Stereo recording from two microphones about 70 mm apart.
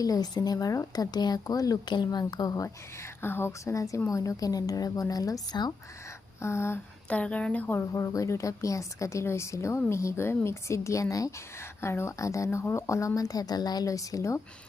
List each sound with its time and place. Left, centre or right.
0.0 s a woman's voice: left
0.9 s speech: left
2.6 s speech: left
3.6 s a woman's voice: left
6.4 s speech: left
7.1 s a woman's voice: centre
7.9 s a woman's voice: left
11.8 s a woman's voice: left